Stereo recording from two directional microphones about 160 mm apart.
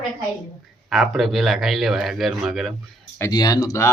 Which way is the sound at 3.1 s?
20° left (ahead or behind).